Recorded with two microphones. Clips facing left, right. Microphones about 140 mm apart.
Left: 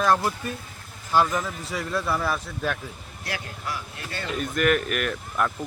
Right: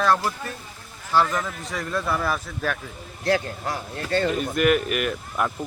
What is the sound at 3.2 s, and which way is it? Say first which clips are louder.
Speech: right 10 dB; 45° right (ahead or behind).